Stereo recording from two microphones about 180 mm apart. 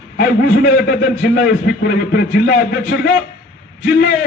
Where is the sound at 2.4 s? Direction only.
70° left (ahead or behind).